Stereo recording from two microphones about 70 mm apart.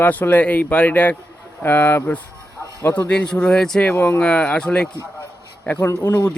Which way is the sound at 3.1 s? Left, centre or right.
Centre.